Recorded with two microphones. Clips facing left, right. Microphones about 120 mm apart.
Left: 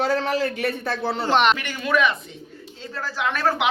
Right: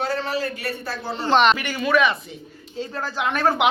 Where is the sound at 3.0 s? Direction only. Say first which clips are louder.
Right 1 dB; 20° right (ahead or behind).